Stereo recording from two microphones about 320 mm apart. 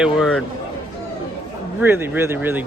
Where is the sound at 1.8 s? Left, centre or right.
Centre.